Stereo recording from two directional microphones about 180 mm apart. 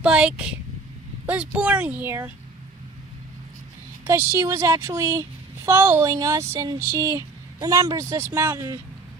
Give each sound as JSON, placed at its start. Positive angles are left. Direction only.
{"t": 0.0, "sound": "speech", "side_deg": -5}
{"t": 4.0, "sound": "speech", "side_deg": -15}